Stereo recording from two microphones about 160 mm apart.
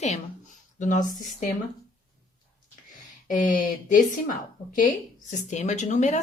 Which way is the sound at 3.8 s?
55° left (ahead or behind).